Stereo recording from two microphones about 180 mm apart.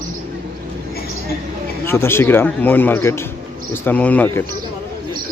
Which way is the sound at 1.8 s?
15° left (ahead or behind).